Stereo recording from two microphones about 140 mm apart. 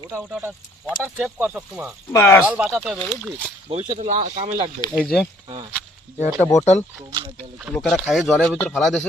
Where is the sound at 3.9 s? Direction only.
55° right (ahead or behind).